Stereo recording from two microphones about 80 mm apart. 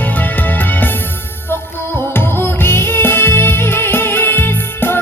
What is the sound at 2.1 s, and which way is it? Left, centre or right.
Music, left.